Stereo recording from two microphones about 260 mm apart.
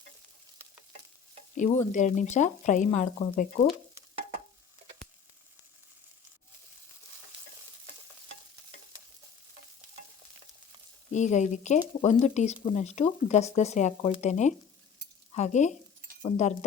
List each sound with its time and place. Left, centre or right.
0.6 s stir: centre
1.5 s speech: left
11.1 s speech: left